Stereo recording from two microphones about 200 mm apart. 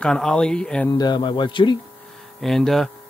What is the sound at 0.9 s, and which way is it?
Speech, 20° left (ahead or behind).